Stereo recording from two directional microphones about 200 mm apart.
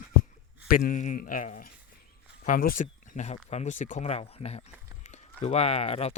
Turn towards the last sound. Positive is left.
turn(degrees=30)  # may be behind; listen again after turning